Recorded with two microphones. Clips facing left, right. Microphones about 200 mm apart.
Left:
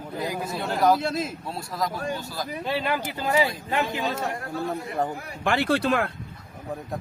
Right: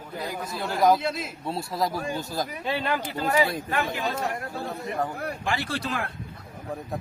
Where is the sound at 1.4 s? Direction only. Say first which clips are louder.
Right 2 dB; 25° right (ahead or behind).